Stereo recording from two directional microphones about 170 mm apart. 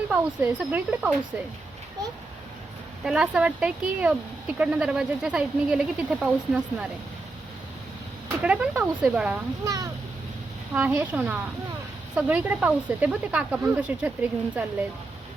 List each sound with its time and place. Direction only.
0.1 s speech: 10° right (ahead or behind)
3.0 s speech: 5° right (ahead or behind)
8.4 s speech: 5° right (ahead or behind)
9.6 s speech: 20° right (ahead or behind)
10.8 s speech: 10° right (ahead or behind)